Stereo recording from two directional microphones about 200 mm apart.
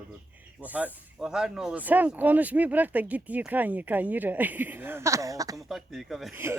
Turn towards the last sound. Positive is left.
turn(degrees=0)  # may be behind; listen again after turning